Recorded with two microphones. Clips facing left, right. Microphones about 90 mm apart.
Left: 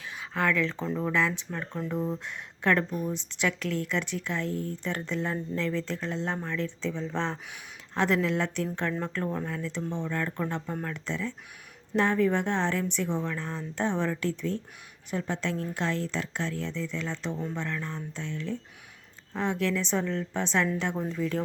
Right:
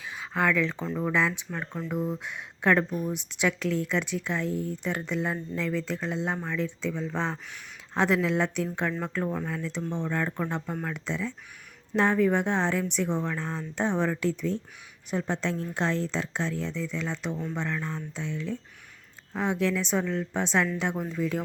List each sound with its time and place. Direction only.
0.2 s a woman's voice: 15° right (ahead or behind)